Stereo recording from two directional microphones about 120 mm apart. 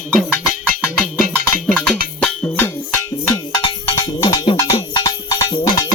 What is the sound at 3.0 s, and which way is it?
Music, 35° left (ahead or behind).